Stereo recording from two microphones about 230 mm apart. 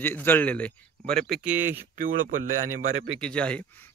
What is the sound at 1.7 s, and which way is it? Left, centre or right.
Speech, right.